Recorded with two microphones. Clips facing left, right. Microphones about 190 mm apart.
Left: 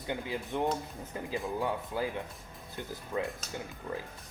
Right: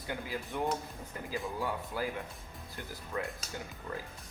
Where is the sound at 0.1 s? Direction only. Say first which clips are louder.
Left 3 dB; 20° left (ahead or behind).